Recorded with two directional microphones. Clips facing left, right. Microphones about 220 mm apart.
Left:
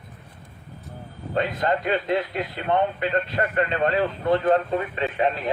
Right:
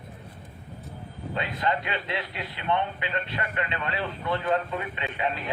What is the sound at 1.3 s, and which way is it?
A man's voice, 40° left (ahead or behind).